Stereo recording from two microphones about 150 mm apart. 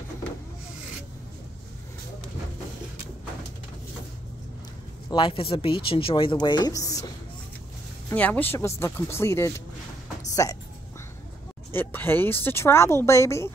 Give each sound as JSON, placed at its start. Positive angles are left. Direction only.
{"t": 5.1, "sound": "speech", "side_deg": 35}
{"t": 8.1, "sound": "speech", "side_deg": 10}
{"t": 11.7, "sound": "speech", "side_deg": 15}